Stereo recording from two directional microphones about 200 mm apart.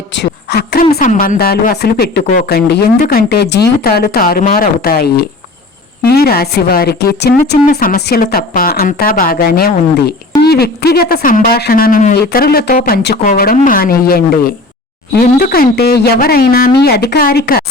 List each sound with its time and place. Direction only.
0.5 s a woman's voice: 55° left (ahead or behind)
0.9 s a woman's voice: 45° left (ahead or behind)
7.5 s a woman's voice: 40° left (ahead or behind)